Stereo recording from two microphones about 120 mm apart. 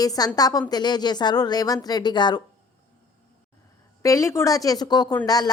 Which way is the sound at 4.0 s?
25° left (ahead or behind).